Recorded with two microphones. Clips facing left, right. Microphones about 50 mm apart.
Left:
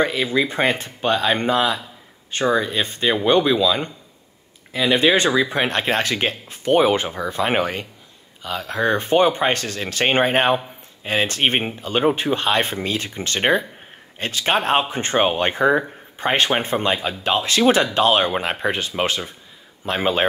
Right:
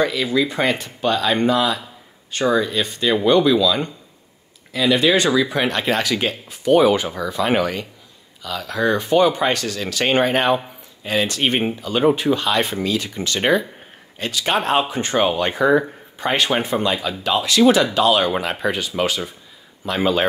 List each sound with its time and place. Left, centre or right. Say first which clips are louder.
0.0 s speech: right 1 dB; left